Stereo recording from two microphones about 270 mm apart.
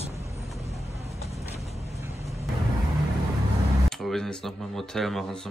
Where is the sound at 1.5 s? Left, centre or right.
Left.